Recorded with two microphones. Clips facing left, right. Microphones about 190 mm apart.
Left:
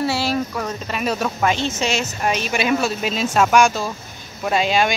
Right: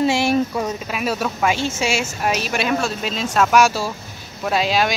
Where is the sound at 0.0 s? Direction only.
20° right (ahead or behind).